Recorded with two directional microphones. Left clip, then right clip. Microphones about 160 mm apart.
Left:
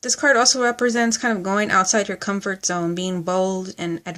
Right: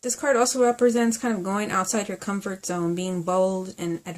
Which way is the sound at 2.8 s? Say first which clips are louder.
Left 3 dB; 40° left (ahead or behind).